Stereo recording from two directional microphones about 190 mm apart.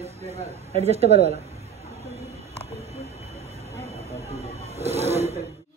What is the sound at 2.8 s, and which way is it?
Train, 35° right (ahead or behind).